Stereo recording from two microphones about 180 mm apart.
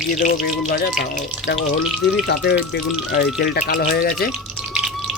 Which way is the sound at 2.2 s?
65° left (ahead or behind).